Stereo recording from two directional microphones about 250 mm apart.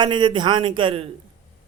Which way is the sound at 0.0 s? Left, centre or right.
Centre.